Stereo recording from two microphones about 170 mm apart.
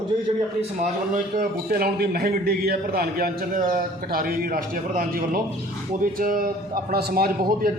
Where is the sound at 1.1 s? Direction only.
60° right (ahead or behind).